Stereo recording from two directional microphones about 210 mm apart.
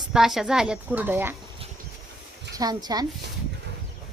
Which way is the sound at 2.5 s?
20° right (ahead or behind).